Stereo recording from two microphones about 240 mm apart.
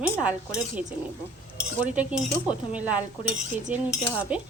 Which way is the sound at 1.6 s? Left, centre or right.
Centre.